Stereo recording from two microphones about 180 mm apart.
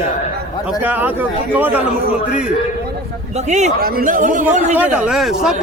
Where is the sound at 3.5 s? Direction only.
40° right (ahead or behind).